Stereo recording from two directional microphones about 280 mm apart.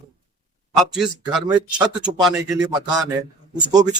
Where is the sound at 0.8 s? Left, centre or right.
Centre.